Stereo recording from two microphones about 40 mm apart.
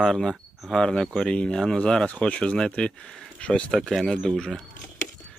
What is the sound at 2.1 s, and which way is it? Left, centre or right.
Speech, left.